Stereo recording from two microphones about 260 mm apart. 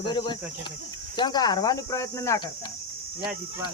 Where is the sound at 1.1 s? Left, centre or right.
Centre.